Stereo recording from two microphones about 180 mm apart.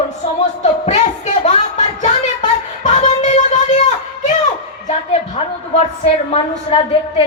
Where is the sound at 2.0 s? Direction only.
40° left (ahead or behind).